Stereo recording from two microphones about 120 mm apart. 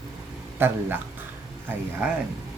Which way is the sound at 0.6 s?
20° right (ahead or behind).